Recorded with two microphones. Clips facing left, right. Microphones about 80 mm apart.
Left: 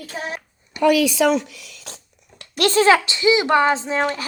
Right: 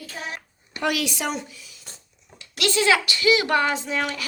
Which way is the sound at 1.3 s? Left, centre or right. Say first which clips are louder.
Left 9 dB; left.